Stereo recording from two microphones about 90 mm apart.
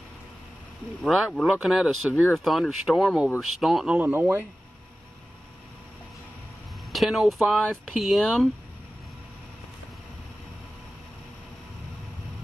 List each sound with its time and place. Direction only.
1.0 s speech: centre (ahead or behind)
3.9 s speech: 20° right (ahead or behind)
6.9 s speech: centre (ahead or behind)